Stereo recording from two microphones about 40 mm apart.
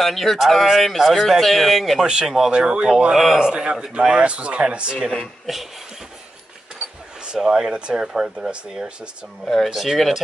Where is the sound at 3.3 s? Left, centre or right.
Right.